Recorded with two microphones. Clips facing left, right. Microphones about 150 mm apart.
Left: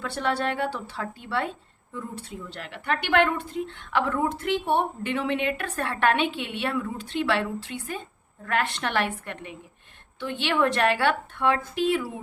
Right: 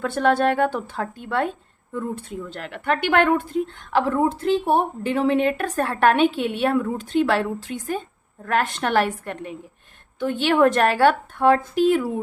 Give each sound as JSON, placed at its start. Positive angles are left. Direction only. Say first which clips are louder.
{"t": 0.0, "sound": "speech", "louder": "right 8 dB", "side_deg": -50}
{"t": 3.9, "sound": "a woman's voice", "louder": "right 5 dB", "side_deg": -35}